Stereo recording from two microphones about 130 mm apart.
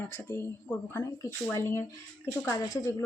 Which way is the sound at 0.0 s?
20° left (ahead or behind).